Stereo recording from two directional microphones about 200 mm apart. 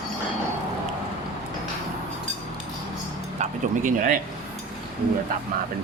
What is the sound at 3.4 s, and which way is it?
Speech, 40° right (ahead or behind).